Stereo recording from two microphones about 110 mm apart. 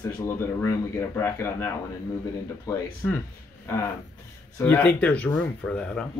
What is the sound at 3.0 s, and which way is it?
Speech, 5° left (ahead or behind).